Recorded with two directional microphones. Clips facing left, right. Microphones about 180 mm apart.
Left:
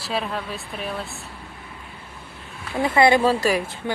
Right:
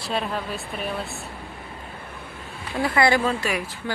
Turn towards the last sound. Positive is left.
turn(degrees=35)  # may be behind; listen again after turning